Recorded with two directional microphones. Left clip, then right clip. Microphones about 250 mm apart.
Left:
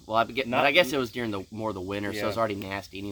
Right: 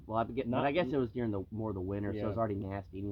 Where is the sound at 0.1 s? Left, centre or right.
Centre.